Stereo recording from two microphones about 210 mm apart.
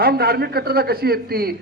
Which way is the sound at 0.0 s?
50° right (ahead or behind).